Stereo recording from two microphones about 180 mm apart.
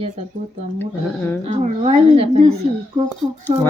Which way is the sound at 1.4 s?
35° right (ahead or behind).